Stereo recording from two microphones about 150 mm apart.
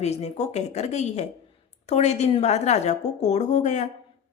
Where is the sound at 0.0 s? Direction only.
45° left (ahead or behind).